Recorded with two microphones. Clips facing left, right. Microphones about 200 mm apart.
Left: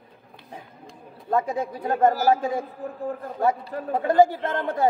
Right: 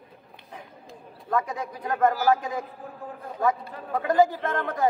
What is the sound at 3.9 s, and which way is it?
Speech, 30° left (ahead or behind).